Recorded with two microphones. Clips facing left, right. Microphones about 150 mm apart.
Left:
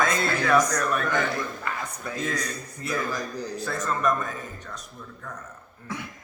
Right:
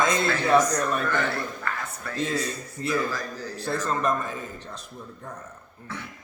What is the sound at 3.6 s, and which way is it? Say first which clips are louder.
Speech: right 1 dB; 30° right (ahead or behind).